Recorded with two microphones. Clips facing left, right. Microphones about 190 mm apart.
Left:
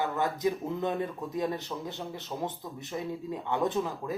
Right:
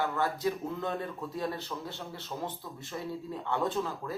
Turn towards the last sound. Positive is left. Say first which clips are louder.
# left 2 dB
turn(degrees=15)  # may be behind; listen again after turning